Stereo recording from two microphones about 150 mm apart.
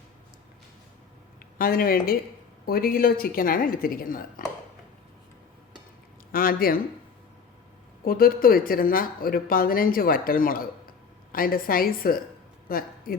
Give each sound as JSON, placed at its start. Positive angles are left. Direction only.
{"t": 1.4, "sound": "speech", "side_deg": 75}
{"t": 6.3, "sound": "speech", "side_deg": 80}
{"t": 8.0, "sound": "speech", "side_deg": 75}